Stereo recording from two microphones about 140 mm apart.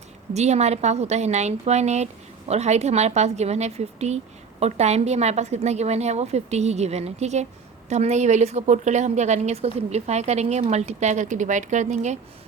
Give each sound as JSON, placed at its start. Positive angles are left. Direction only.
{"t": 0.3, "sound": "a woman's voice", "side_deg": -50}